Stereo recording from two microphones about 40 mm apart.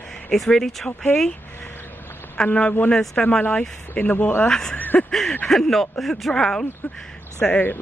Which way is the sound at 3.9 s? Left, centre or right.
Left.